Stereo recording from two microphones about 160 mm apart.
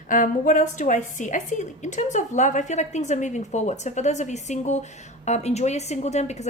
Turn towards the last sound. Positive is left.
turn(degrees=45)  # may be behind; listen again after turning